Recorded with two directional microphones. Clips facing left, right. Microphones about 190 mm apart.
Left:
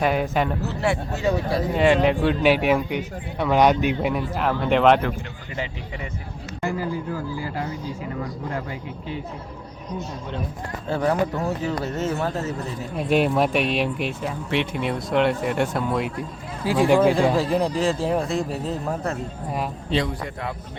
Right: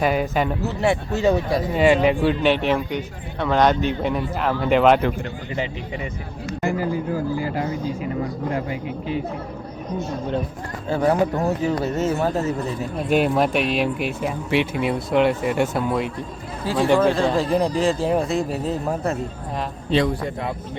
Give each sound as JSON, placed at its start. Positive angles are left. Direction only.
{"t": 0.0, "sound": "speech", "side_deg": 0}
{"t": 0.6, "sound": "speech", "side_deg": -15}
{"t": 1.7, "sound": "a man's voice", "side_deg": -5}
{"t": 6.6, "sound": "speech", "side_deg": -15}
{"t": 10.8, "sound": "speech", "side_deg": 0}
{"t": 13.0, "sound": "speech", "side_deg": 0}
{"t": 16.6, "sound": "speech", "side_deg": 10}